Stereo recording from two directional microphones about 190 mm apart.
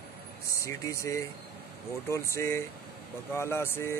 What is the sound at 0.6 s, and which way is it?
Speech, 15° left (ahead or behind).